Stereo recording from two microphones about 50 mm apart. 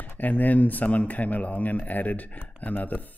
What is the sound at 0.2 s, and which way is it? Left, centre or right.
Speech, left.